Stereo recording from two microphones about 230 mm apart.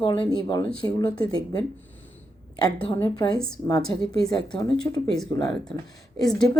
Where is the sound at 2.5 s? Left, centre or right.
Centre.